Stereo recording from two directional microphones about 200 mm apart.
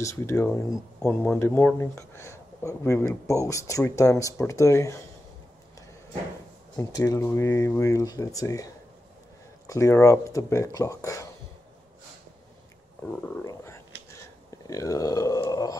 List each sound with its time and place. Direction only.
0.0 s speech: 15° left (ahead or behind)
6.8 s speech: 15° left (ahead or behind)
9.7 s speech: 15° left (ahead or behind)
13.2 s speech: 15° left (ahead or behind)